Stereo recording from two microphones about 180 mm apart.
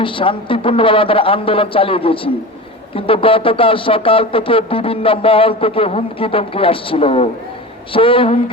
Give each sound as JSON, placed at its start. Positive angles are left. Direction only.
{"t": 0.0, "sound": "a man's voice", "side_deg": 30}